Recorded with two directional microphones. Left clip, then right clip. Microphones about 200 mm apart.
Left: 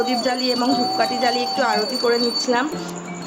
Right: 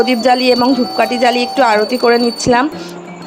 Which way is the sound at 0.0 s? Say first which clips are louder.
Right 9 dB; 40° right (ahead or behind).